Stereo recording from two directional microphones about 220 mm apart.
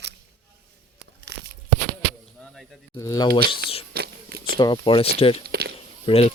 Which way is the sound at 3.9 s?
45° right (ahead or behind).